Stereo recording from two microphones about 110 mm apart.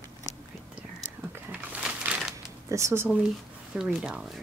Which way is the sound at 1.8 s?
5° right (ahead or behind).